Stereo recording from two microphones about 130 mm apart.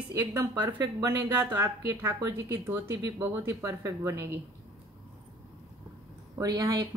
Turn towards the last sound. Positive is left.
turn(degrees=-25)  # may be behind; listen again after turning